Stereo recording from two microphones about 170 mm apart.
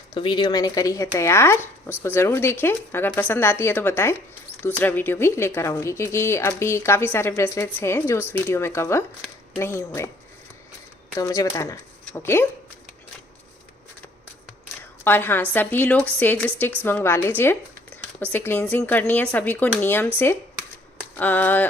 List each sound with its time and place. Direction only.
0.1 s speech: 30° left (ahead or behind)
11.2 s speech: 20° left (ahead or behind)
15.0 s speech: 10° left (ahead or behind)
21.2 s speech: 10° left (ahead or behind)